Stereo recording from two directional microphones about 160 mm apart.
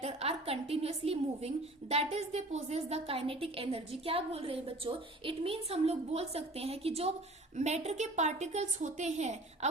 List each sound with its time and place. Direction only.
0.0 s a woman's voice: 40° right (ahead or behind)